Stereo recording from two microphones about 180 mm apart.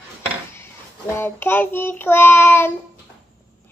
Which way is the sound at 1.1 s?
10° left (ahead or behind).